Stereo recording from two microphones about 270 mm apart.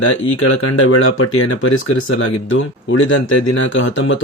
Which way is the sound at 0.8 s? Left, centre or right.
Left.